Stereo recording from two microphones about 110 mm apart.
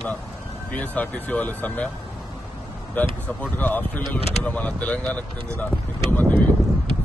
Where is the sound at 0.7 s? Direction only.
15° left (ahead or behind).